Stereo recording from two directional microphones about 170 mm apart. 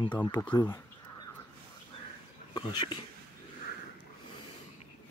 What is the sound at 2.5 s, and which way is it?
Speech, 25° left (ahead or behind).